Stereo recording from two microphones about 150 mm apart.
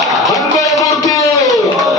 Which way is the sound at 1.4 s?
Centre (ahead or behind).